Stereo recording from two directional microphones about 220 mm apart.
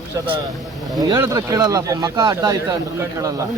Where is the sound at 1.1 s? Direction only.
15° right (ahead or behind).